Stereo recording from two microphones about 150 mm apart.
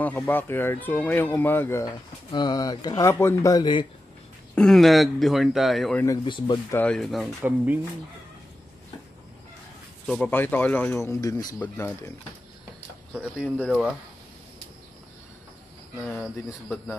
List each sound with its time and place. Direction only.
0.0 s speech: 10° left (ahead or behind); by 3.8 s 30° left (ahead or behind)
4.6 s speech: centre (ahead or behind)
6.2 s speech: 30° left (ahead or behind)
6.7 s speech: 10° left (ahead or behind)
7.4 s speech: 10° right (ahead or behind)
10.0 s speech: 5° left (ahead or behind)
10.3 s speech: 15° left (ahead or behind)
13.1 s speech: 5° right (ahead or behind)
16.0 s speech: 5° left (ahead or behind)